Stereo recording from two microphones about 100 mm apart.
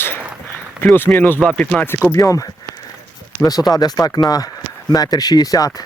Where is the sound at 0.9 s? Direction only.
20° left (ahead or behind).